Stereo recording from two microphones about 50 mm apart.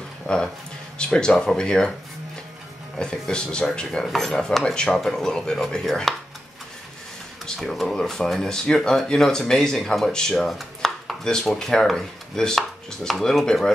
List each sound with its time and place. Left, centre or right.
0.3 s chopping: centre
3.0 s chopping: centre
4.0 s chopping: centre
6.1 s speech: centre
7.4 s speech: centre
7.8 s chopping: centre